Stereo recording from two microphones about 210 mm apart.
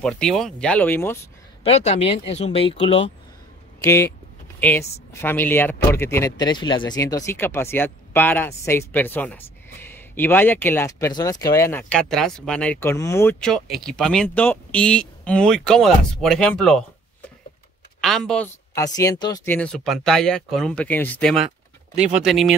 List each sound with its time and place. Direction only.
0.0 s speech: centre (ahead or behind)
1.6 s speech: 30° left (ahead or behind)
3.8 s speech: 15° left (ahead or behind)
18.0 s speech: centre (ahead or behind)
18.8 s speech: 15° left (ahead or behind); by 22.6 s centre (ahead or behind)